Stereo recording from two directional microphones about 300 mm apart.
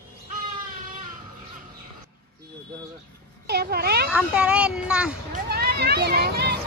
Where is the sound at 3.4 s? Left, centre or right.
Right.